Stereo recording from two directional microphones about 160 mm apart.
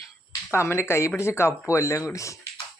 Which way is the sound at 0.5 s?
15° left (ahead or behind).